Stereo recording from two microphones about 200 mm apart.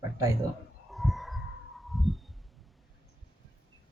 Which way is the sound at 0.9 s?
Centre (ahead or behind).